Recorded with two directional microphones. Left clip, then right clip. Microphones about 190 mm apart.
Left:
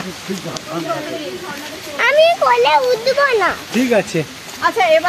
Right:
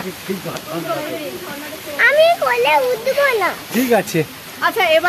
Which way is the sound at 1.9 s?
30° left (ahead or behind).